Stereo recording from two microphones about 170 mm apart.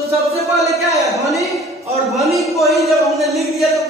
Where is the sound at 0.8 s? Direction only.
Centre (ahead or behind).